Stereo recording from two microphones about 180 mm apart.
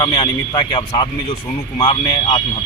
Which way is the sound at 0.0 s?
20° left (ahead or behind).